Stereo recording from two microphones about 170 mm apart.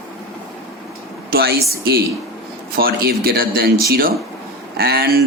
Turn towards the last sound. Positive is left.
turn(degrees=-65)  # may be behind; listen again after turning